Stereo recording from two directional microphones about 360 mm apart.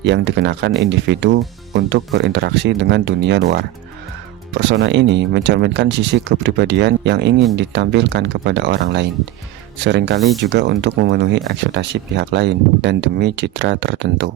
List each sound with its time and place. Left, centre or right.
0.0 s speech: right
10.2 s speech: centre
10.5 s speech: right